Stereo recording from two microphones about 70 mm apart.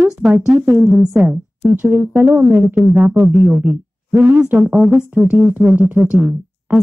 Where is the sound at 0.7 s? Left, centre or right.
Right.